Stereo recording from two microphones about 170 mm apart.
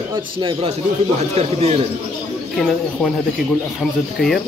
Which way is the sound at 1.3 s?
40° right (ahead or behind).